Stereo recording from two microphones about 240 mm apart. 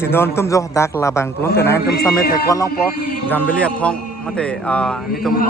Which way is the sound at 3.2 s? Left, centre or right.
Centre.